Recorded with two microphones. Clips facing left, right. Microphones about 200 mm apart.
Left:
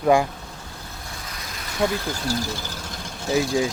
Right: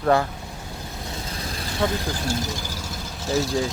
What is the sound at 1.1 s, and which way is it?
Vehicle, 25° right (ahead or behind).